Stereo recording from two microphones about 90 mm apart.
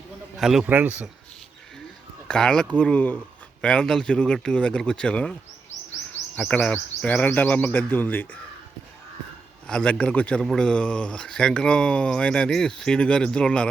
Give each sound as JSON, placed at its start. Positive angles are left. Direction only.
{"t": 0.3, "sound": "a man's voice", "side_deg": -5}
{"t": 0.7, "sound": "speech", "side_deg": -20}
{"t": 2.2, "sound": "speech", "side_deg": 10}
{"t": 6.5, "sound": "speech", "side_deg": 15}
{"t": 9.6, "sound": "speech", "side_deg": 10}